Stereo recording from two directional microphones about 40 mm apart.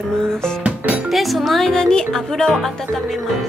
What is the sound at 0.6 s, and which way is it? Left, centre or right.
Speech, right.